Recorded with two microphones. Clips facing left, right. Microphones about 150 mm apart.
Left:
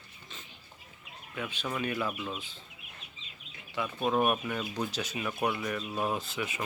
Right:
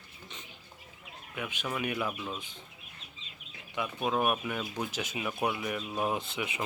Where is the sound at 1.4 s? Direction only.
10° right (ahead or behind).